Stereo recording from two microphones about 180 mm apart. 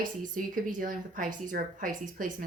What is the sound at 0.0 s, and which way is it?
Speech, 50° right (ahead or behind).